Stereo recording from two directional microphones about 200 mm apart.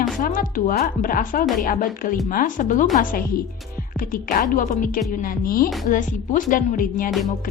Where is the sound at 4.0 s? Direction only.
45° left (ahead or behind).